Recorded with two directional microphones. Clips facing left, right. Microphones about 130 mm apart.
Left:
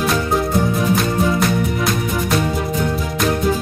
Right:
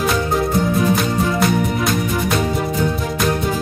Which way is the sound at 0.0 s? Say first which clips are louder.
Even; centre (ahead or behind).